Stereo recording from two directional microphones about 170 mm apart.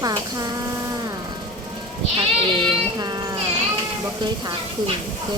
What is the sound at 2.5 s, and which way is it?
Speech, 25° right (ahead or behind).